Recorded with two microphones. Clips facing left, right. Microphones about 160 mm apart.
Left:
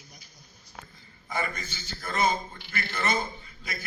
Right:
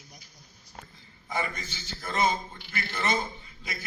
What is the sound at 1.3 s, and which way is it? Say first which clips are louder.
A man's voice: even; 15° right (ahead or behind).